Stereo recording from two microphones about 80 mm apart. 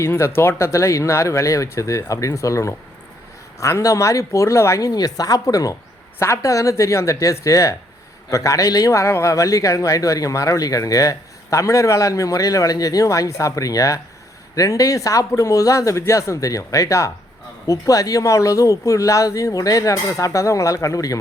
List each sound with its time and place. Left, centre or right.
0.0 s speech: left
4.9 s a man's voice: left
6.1 s a man's voice: left